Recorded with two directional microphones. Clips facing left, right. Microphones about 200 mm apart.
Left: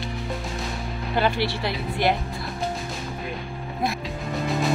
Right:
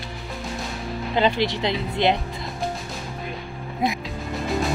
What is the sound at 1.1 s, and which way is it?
Speech, 20° right (ahead or behind).